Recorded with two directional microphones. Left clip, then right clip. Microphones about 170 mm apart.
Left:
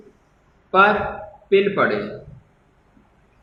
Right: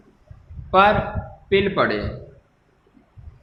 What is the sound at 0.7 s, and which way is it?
A man's voice, 45° right (ahead or behind).